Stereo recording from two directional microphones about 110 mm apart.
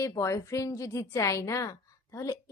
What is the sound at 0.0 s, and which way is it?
Speech, 30° left (ahead or behind).